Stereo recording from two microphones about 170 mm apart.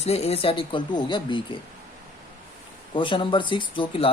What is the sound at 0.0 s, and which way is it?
Speech, 40° left (ahead or behind).